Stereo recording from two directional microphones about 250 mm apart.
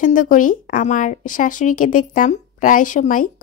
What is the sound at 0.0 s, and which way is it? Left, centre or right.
Speech, left.